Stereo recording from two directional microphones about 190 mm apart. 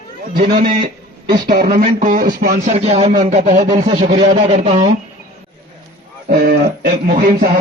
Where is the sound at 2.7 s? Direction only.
30° right (ahead or behind).